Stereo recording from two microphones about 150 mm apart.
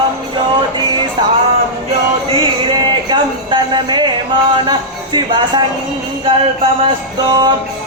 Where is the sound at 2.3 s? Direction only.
35° right (ahead or behind).